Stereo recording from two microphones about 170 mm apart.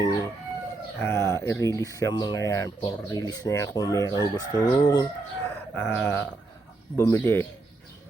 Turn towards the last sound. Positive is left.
turn(degrees=15)  # may be behind; listen again after turning